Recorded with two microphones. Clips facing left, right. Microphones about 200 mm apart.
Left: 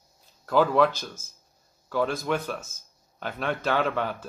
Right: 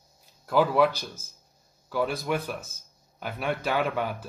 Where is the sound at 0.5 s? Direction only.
5° right (ahead or behind).